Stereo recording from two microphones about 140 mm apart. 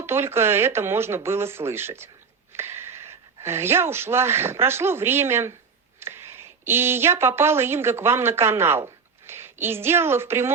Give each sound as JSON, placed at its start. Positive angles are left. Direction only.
{"t": 0.0, "sound": "speech", "side_deg": -15}